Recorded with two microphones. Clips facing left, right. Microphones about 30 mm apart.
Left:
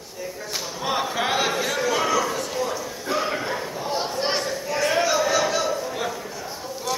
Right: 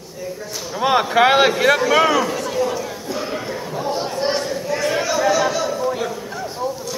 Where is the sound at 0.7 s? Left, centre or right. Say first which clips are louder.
Right 10 dB; right.